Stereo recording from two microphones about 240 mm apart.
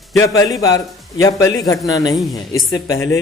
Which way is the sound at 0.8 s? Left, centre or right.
Centre.